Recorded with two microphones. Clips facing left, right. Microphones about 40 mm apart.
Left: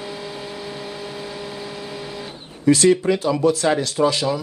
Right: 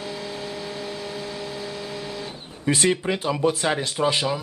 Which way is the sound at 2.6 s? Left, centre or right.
Right.